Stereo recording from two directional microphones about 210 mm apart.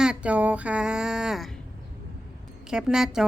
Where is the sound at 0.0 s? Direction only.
5° right (ahead or behind).